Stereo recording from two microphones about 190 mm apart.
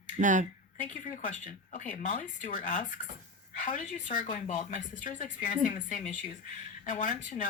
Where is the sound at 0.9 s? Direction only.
40° left (ahead or behind).